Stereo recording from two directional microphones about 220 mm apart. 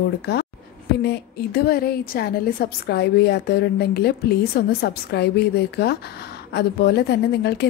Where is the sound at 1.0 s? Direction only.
45° left (ahead or behind).